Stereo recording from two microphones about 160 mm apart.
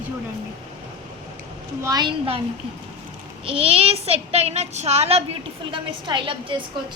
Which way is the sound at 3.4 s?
35° right (ahead or behind).